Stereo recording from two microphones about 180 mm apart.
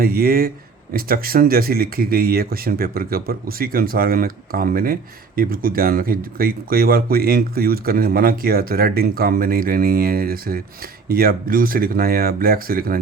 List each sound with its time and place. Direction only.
0.0 s speech: 55° right (ahead or behind)